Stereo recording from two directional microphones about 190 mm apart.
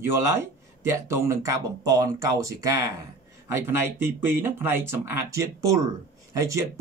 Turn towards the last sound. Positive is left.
turn(degrees=-15)  # may be behind; listen again after turning